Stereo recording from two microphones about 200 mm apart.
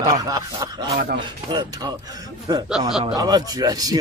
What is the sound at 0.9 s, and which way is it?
Speech, 50° right (ahead or behind).